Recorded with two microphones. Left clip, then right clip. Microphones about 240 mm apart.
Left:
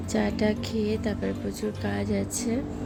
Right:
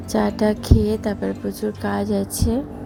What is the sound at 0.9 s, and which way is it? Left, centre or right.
Speech, centre.